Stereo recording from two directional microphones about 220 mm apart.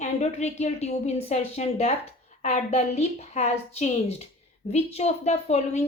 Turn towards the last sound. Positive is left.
turn(degrees=30)  # may be behind; listen again after turning